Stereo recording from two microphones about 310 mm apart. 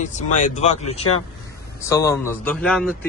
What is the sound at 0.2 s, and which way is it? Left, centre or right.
Speech, left.